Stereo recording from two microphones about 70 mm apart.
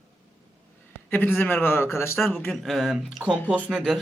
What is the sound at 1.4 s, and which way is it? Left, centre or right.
Speech, left.